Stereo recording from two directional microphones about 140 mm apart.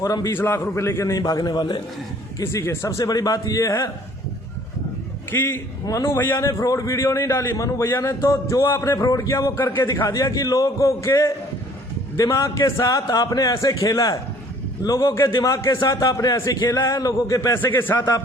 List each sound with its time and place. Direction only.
0.0 s a man's voice: 25° left (ahead or behind)
2.4 s a man's voice: 20° left (ahead or behind)
5.3 s a man's voice: 15° left (ahead or behind)